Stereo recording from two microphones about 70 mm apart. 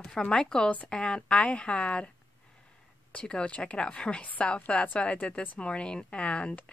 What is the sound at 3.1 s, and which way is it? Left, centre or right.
A woman's voice, centre.